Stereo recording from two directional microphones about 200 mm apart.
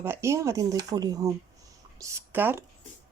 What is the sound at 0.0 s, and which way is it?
Speech, 15° right (ahead or behind).